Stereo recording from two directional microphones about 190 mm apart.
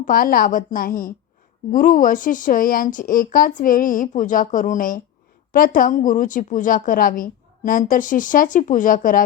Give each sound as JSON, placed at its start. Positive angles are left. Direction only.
{"t": 0.0, "sound": "a woman's voice", "side_deg": 50}